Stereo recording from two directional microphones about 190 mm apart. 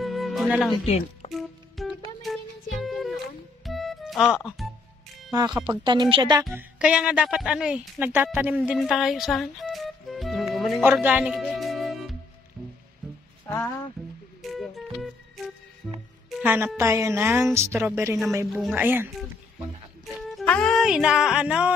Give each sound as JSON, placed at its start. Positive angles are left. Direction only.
{"t": 0.0, "sound": "music", "side_deg": 0}
{"t": 0.8, "sound": "speech", "side_deg": 30}
{"t": 1.3, "sound": "music", "side_deg": 0}
{"t": 5.3, "sound": "speech", "side_deg": -20}
{"t": 6.5, "sound": "speech", "side_deg": -5}
{"t": 8.4, "sound": "music", "side_deg": -10}
{"t": 10.8, "sound": "music", "side_deg": -10}
{"t": 13.5, "sound": "speech", "side_deg": 15}
{"t": 14.4, "sound": "music", "side_deg": 0}
{"t": 16.3, "sound": "a woman's voice", "side_deg": -5}
{"t": 18.5, "sound": "speech", "side_deg": 0}
{"t": 20.1, "sound": "speech", "side_deg": -5}